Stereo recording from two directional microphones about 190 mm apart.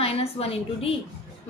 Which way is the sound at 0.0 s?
30° left (ahead or behind).